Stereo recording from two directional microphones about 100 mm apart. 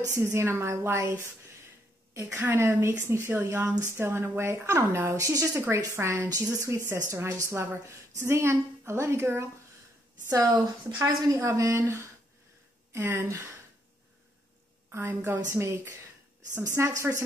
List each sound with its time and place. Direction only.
0.1 s a woman's voice: 25° right (ahead or behind)
2.3 s a woman's voice: 25° right (ahead or behind)
10.3 s a woman's voice: 40° right (ahead or behind)
14.9 s a woman's voice: 25° right (ahead or behind)